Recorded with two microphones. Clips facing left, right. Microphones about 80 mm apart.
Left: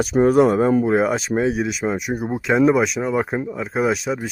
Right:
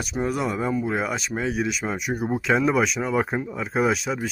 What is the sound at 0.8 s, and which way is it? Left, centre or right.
Speech, left.